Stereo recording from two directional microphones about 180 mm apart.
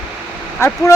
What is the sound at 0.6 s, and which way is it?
Speech, 15° left (ahead or behind).